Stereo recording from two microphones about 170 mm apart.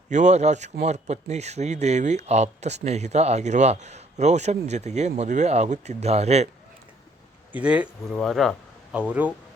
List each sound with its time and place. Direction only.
0.1 s speech: 45° right (ahead or behind)
7.5 s speech: 5° right (ahead or behind)